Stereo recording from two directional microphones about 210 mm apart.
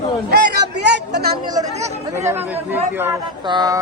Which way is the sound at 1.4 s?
20° right (ahead or behind).